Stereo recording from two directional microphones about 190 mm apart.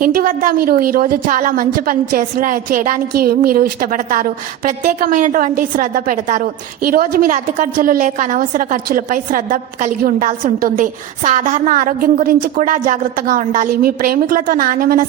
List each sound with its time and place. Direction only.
0.0 s a woman's voice: 45° right (ahead or behind)